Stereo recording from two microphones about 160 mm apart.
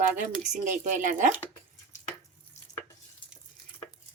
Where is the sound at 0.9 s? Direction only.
50° right (ahead or behind).